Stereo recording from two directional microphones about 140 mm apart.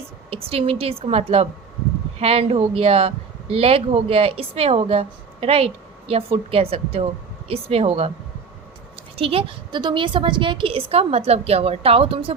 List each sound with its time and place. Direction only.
0.3 s speech: 45° right (ahead or behind)
9.1 s a woman's voice: 40° right (ahead or behind)